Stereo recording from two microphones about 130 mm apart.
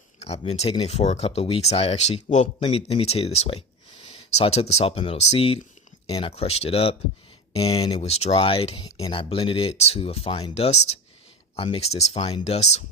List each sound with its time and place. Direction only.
0.2 s speech: 55° left (ahead or behind)